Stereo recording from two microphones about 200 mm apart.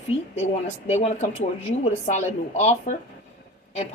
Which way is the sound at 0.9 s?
35° left (ahead or behind).